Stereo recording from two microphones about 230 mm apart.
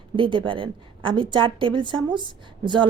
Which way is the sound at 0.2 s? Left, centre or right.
Right.